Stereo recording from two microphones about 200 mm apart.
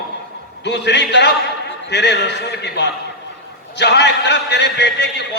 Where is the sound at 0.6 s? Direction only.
60° left (ahead or behind).